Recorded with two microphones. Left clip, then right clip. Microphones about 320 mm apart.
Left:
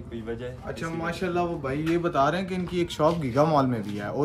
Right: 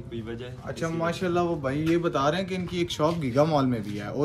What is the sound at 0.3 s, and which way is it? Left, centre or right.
A man's voice, centre.